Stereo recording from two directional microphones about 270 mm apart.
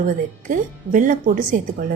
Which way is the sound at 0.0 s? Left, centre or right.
Right.